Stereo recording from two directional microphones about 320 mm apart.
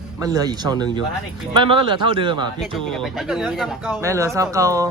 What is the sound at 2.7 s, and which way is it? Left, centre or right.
Speech, centre.